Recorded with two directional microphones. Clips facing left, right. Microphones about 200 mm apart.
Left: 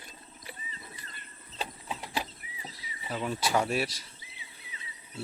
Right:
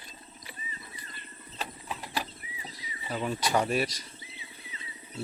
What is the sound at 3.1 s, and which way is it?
Speech, centre (ahead or behind).